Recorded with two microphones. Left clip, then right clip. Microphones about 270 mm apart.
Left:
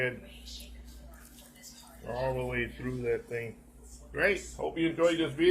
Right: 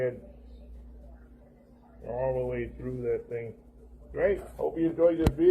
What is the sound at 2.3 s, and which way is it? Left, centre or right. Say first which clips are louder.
Speech: right 2 dB; left.